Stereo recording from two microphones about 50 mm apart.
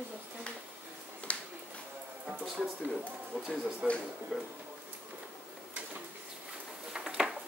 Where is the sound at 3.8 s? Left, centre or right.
Centre.